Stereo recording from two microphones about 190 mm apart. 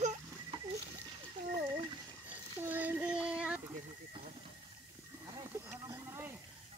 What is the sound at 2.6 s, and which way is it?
Child singing, 10° right (ahead or behind).